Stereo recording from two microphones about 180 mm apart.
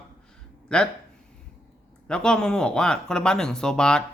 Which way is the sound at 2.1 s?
5° left (ahead or behind).